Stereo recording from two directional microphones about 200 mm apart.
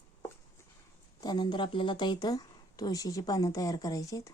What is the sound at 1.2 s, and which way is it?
Speech, 20° left (ahead or behind).